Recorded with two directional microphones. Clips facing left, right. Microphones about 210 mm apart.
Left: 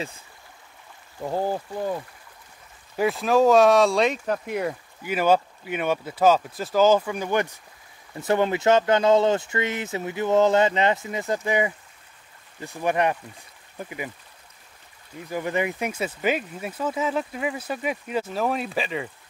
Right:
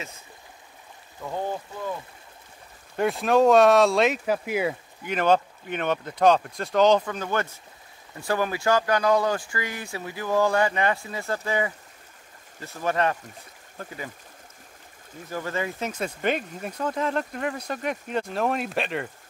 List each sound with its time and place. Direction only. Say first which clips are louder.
1.2 s speech: left 4 dB; 35° left (ahead or behind)
3.0 s speech: even; centre (ahead or behind)
5.0 s speech: left 1 dB; 5° left (ahead or behind)
15.2 s speech: left 4 dB; 15° left (ahead or behind); by 19.0 s centre (ahead or behind)